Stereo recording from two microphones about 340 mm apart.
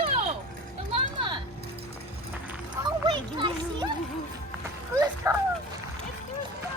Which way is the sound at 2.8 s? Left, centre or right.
Centre.